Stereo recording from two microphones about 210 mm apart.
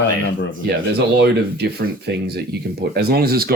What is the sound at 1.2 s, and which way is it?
Speech, 50° right (ahead or behind).